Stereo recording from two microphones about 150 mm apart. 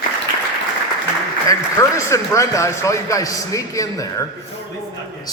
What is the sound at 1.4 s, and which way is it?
A man's voice, 20° left (ahead or behind).